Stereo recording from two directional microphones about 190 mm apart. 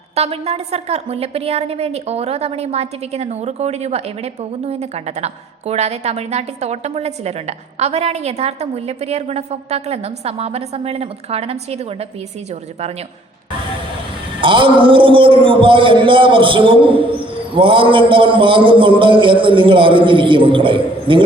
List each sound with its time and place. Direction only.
0.1 s a woman's voice: 35° right (ahead or behind)
14.4 s a man's voice: 25° right (ahead or behind)